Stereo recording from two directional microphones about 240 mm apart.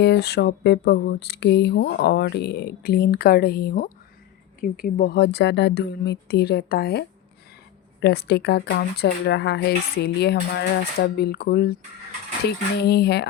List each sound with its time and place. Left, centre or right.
0.0 s speech: left
8.0 s speech: left